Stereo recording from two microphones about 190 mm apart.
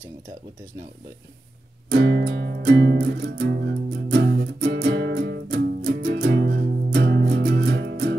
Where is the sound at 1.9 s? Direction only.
65° right (ahead or behind).